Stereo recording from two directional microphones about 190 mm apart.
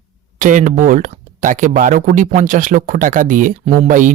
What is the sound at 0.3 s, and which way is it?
Speech, 45° right (ahead or behind).